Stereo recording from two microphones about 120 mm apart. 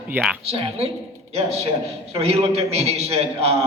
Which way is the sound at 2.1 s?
55° right (ahead or behind).